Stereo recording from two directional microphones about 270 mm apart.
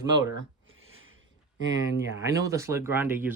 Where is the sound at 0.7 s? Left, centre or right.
Right.